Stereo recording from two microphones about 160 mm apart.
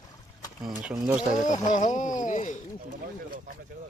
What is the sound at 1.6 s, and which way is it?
Speech, 50° left (ahead or behind).